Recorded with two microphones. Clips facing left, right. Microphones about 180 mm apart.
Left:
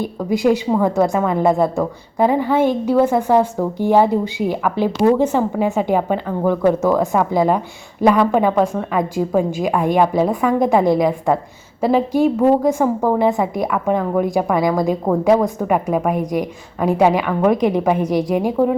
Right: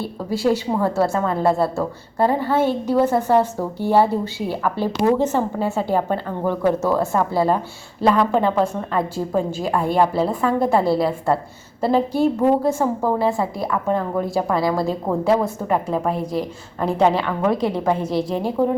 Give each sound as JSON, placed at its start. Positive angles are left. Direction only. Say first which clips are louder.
{"t": 0.0, "sound": "a woman's voice", "louder": "left 4 dB", "side_deg": 15}